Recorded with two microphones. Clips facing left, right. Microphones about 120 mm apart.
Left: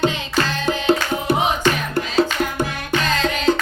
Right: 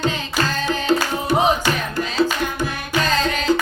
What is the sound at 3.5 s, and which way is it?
Music, 50° left (ahead or behind).